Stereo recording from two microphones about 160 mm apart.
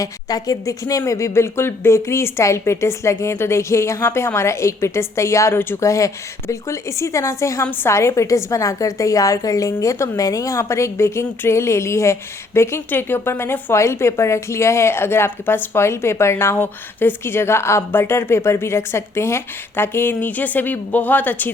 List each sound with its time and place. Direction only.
0.0 s a woman's voice: 25° left (ahead or behind)